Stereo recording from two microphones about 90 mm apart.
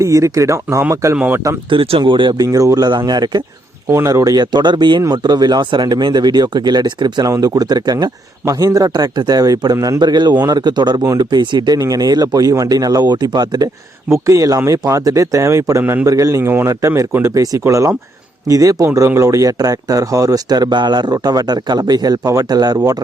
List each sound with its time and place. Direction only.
0.0 s speech: 35° right (ahead or behind)
1.1 s speech: 15° right (ahead or behind)
1.7 s speech: 80° right; by 2.3 s 65° right (ahead or behind)
2.4 s speech: 40° right (ahead or behind)
3.8 s speech: 35° right (ahead or behind); by 7.3 s 55° right (ahead or behind)
7.3 s speech: 40° right (ahead or behind)
11.8 s speech: 40° right (ahead or behind)
14.1 s speech: 40° right (ahead or behind)
15.8 s a man's voice: 20° right (ahead or behind)
16.0 s speech: 40° right (ahead or behind)
16.4 s a man's voice: 25° right (ahead or behind)
16.6 s speech: 35° right (ahead or behind)
17.3 s speech: 40° right (ahead or behind)